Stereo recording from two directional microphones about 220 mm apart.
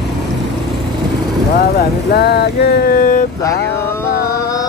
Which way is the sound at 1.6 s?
45° left (ahead or behind).